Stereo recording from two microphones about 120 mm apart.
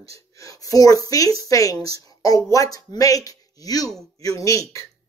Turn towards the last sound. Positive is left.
turn(degrees=25)  # may be behind; listen again after turning